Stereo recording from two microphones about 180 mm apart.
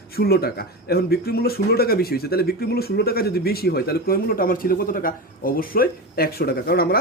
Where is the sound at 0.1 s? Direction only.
60° left (ahead or behind).